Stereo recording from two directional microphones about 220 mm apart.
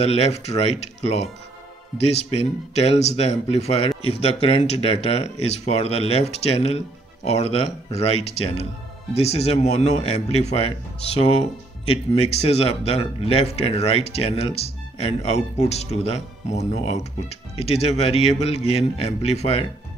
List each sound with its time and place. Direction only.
0.0 s speech: 25° left (ahead or behind)